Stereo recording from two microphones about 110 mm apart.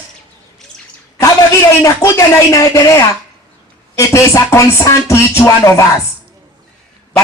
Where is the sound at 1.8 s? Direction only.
25° left (ahead or behind).